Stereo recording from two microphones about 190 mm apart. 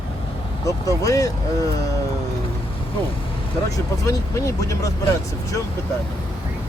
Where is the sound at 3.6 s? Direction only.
15° left (ahead or behind).